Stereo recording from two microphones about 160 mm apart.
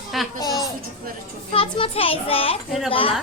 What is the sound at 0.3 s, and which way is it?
Speech, 25° left (ahead or behind).